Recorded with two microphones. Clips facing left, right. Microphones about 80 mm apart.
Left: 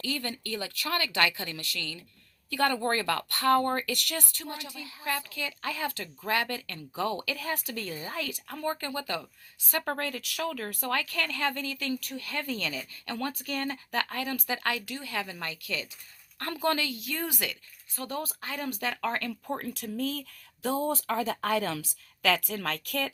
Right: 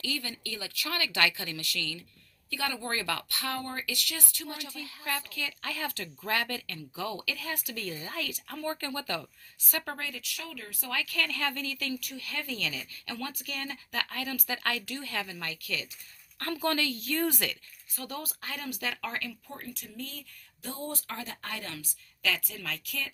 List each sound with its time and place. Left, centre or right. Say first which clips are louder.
0.0 s speech: left 3 dB; left
2.5 s a woman's voice: left 7 dB; left
3.6 s a woman's voice: left 7 dB; left
4.4 s speech: left 1 dB; left
10.0 s a woman's voice: left 7 dB; left
11.0 s speech: left 2 dB; left; by 17.6 s centre
17.9 s speech: left 4 dB; left
19.5 s a woman's voice: left 9 dB; left